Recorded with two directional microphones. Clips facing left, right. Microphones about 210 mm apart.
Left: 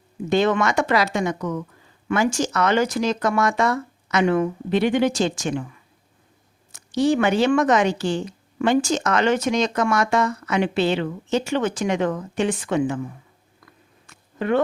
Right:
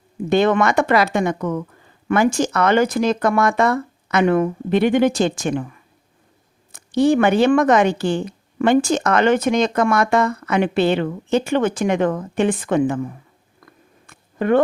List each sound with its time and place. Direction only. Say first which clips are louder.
0.3 s speech: right 3 dB; 55° right (ahead or behind)
6.7 s speech: right 4 dB; 55° right (ahead or behind)
14.1 s a sound: right 4 dB; 50° right (ahead or behind)